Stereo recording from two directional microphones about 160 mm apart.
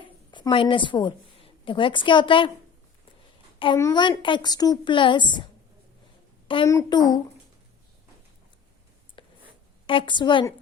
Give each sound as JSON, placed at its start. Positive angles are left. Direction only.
{"t": 0.0, "sound": "a woman's voice", "side_deg": 25}
{"t": 3.8, "sound": "a woman's voice", "side_deg": 25}
{"t": 6.7, "sound": "a woman's voice", "side_deg": 20}
{"t": 9.2, "sound": "writing", "side_deg": 30}
{"t": 9.8, "sound": "a woman's voice", "side_deg": 35}